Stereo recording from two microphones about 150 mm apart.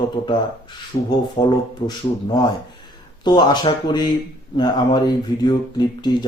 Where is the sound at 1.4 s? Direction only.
35° left (ahead or behind).